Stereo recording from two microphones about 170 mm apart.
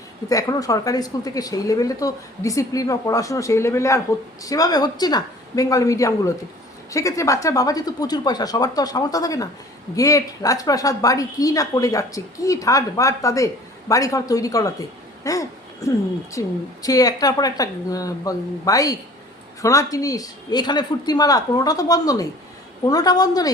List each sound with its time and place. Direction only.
0.3 s a woman's voice: 20° left (ahead or behind)